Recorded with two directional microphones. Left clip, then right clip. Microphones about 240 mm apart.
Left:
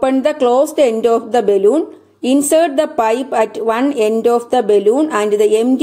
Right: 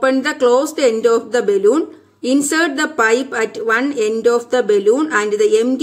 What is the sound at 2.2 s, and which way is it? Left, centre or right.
A woman's voice, centre.